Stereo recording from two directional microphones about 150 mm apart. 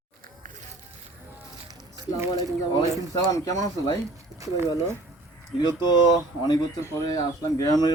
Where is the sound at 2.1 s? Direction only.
20° right (ahead or behind).